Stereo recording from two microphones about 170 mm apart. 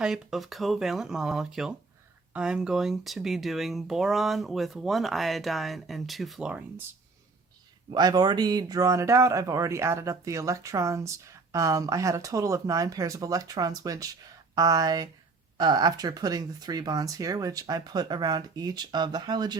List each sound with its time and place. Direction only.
0.0 s speech: 5° right (ahead or behind)
7.9 s speech: 25° right (ahead or behind)